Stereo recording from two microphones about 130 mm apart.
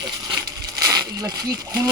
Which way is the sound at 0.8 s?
30° right (ahead or behind).